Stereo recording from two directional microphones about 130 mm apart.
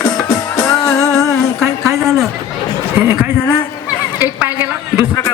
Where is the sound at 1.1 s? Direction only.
5° left (ahead or behind).